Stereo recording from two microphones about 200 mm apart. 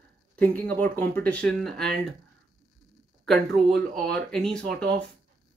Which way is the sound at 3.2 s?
Centre (ahead or behind).